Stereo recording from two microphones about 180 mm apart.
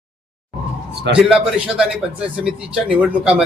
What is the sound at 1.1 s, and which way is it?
Speech, 75° right (ahead or behind).